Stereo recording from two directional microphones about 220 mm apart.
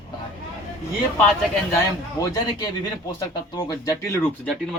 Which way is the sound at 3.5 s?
15° left (ahead or behind).